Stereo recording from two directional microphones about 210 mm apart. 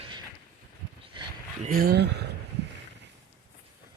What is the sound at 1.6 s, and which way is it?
Speech, 45° right (ahead or behind).